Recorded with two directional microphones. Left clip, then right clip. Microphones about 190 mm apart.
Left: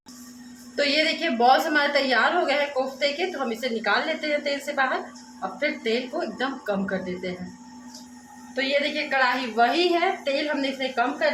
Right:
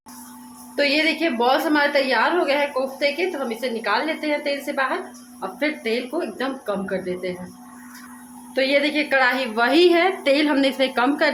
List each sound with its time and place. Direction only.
0.8 s a woman's voice: 15° right (ahead or behind)
8.5 s a woman's voice: 35° right (ahead or behind); by 11.3 s 55° right (ahead or behind)